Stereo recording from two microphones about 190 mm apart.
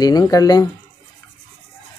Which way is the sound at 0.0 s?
20° left (ahead or behind).